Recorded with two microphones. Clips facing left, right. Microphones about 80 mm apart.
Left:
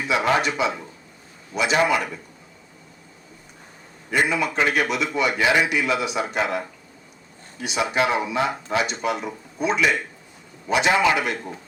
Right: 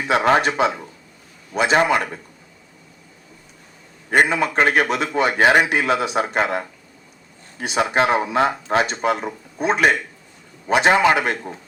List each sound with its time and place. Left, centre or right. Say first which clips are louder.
0.1 s speech: right 4 dB; right
4.3 s a man's voice: right 4 dB; right